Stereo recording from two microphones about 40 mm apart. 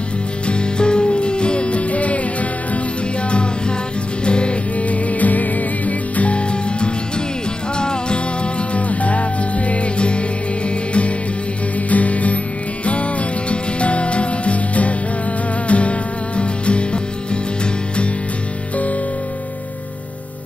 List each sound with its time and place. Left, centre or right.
0.5 s music: left
3.3 s music: left
8.7 s music: left
13.5 s music: left